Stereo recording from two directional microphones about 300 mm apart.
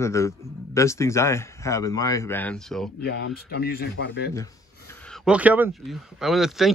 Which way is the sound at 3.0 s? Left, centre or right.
Left.